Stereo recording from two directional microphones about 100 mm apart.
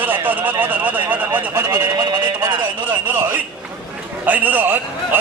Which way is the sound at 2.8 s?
20° right (ahead or behind).